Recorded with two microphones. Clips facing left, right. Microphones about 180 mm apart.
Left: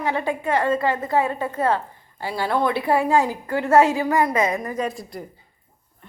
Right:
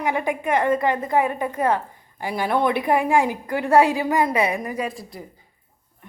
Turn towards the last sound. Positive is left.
turn(degrees=0)  # may be behind; listen again after turning